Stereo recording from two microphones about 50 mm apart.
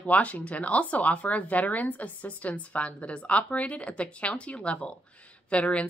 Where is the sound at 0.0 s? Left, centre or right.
Left.